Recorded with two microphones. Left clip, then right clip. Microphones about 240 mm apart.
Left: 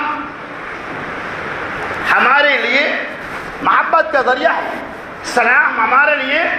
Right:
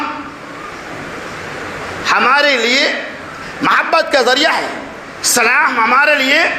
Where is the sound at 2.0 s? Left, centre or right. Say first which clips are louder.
Even; right.